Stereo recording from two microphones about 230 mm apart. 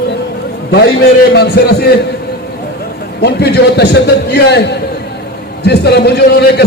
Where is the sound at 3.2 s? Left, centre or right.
Left.